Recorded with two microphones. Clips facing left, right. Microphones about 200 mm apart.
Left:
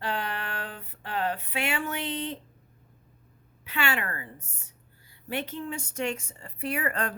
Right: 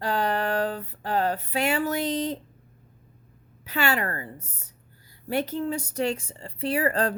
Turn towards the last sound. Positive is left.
turn(degrees=-35)  # may be behind; listen again after turning